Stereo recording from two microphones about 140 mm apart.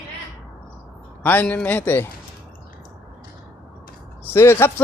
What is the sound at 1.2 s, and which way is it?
Speech, 15° left (ahead or behind).